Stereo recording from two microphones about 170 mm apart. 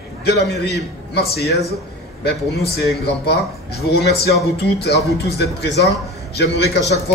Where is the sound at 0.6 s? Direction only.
75° left (ahead or behind).